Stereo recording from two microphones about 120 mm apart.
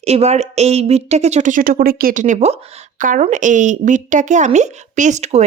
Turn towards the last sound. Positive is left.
turn(degrees=-70)  # may be behind; listen again after turning